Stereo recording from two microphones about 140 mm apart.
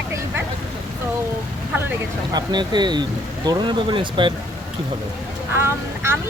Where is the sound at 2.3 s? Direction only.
30° right (ahead or behind).